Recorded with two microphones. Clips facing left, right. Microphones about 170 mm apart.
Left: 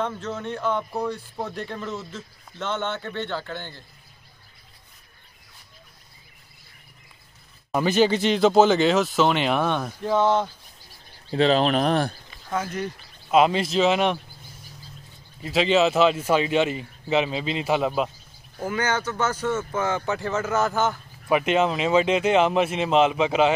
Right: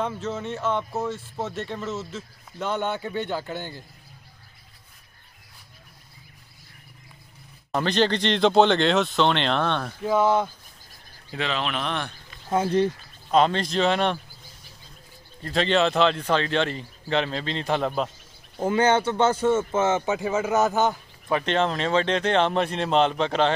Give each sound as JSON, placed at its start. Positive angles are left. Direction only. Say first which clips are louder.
{"t": 0.0, "sound": "speech", "louder": "even", "side_deg": -5}
{"t": 7.7, "sound": "speech", "louder": "left 3 dB", "side_deg": 5}
{"t": 10.0, "sound": "speech", "louder": "even", "side_deg": -10}
{"t": 11.3, "sound": "speech", "louder": "left 9 dB", "side_deg": 35}
{"t": 12.4, "sound": "speech", "louder": "right 6 dB", "side_deg": -30}
{"t": 13.3, "sound": "speech", "louder": "left 2 dB", "side_deg": 5}
{"t": 15.4, "sound": "speech", "louder": "left 2 dB", "side_deg": 5}
{"t": 18.6, "sound": "speech", "louder": "right 5 dB", "side_deg": -25}
{"t": 21.3, "sound": "speech", "louder": "left 3 dB", "side_deg": 10}